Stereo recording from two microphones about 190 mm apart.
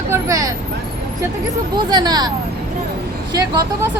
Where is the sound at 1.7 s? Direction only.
20° right (ahead or behind).